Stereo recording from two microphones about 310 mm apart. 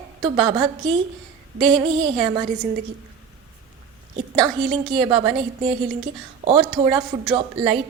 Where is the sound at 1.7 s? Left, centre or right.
Centre.